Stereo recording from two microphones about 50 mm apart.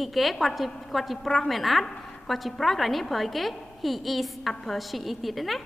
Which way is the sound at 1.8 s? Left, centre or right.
Centre.